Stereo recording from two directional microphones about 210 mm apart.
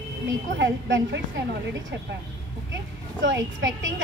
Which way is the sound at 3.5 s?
60° right (ahead or behind).